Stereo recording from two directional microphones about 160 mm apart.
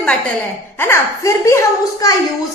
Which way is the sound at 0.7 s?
15° left (ahead or behind).